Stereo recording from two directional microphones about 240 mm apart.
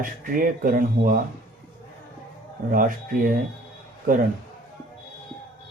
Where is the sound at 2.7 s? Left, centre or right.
Right.